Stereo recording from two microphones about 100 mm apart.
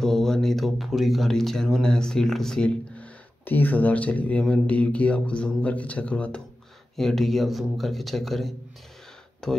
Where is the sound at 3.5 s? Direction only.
15° left (ahead or behind).